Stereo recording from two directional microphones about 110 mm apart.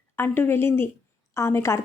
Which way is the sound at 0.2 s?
20° left (ahead or behind).